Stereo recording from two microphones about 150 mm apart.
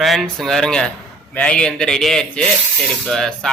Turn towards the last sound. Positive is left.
turn(degrees=5)  # may be behind; listen again after turning